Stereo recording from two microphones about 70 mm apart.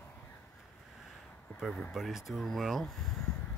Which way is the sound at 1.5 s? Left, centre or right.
Left.